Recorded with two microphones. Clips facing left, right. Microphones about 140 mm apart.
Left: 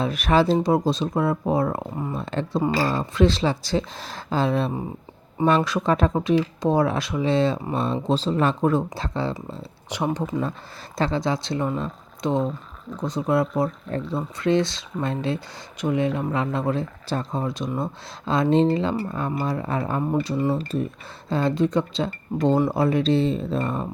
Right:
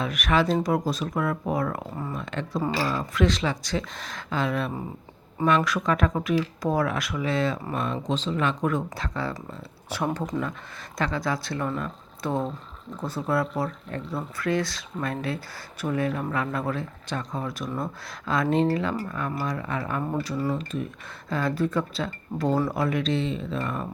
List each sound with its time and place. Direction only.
0.0 s speech: 30° left (ahead or behind)
2.7 s speech: 35° left (ahead or behind)
9.9 s speech: 15° left (ahead or behind)
10.9 s speech: 30° left (ahead or behind)
20.0 s speech: 20° left (ahead or behind)